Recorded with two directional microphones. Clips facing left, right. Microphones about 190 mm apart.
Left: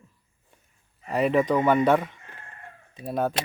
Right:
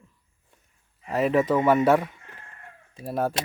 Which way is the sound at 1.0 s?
Centre (ahead or behind).